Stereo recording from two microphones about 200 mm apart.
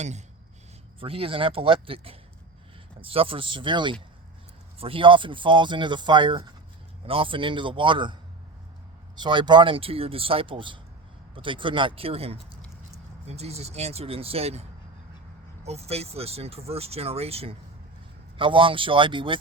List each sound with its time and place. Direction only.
0.0 s speech: 35° right (ahead or behind)
9.1 s speech: 20° right (ahead or behind)